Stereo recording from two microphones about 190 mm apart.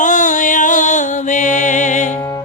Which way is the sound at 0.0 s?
40° left (ahead or behind).